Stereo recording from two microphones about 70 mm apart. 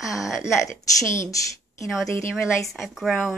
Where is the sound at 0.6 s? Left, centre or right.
Left.